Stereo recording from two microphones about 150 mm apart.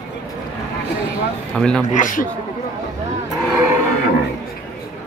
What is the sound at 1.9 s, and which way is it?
Speech, 60° left (ahead or behind).